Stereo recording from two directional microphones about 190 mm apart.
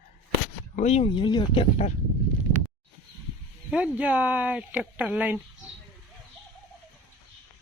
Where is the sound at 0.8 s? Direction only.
35° left (ahead or behind).